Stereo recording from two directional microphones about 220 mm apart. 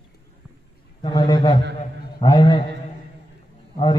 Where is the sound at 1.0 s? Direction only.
20° left (ahead or behind).